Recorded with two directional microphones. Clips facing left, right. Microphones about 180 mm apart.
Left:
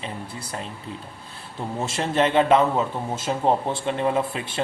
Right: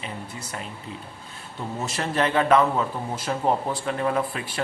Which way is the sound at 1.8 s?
25° left (ahead or behind).